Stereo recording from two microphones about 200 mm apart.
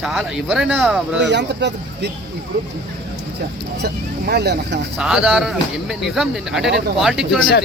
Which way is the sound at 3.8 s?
55° right (ahead or behind).